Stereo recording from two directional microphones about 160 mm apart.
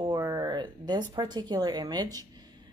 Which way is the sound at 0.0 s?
25° right (ahead or behind).